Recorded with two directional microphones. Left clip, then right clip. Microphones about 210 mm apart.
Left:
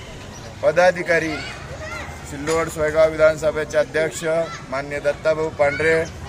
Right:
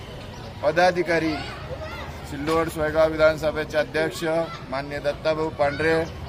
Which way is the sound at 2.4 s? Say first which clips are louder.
Left 3 dB; 15° left (ahead or behind).